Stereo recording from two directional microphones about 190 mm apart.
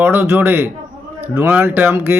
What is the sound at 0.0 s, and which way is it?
Speech, 10° right (ahead or behind).